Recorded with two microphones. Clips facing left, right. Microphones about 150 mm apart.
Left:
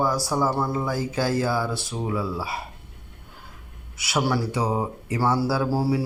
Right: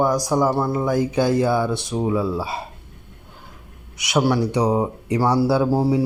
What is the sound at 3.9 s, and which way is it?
Mantra, 20° right (ahead or behind).